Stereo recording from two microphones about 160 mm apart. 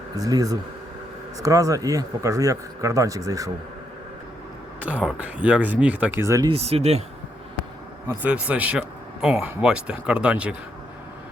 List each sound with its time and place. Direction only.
0.2 s speech: 25° right (ahead or behind)
4.8 s speech: 10° right (ahead or behind)
6.5 s speech: 40° right (ahead or behind)
8.0 s speech: 10° right (ahead or behind)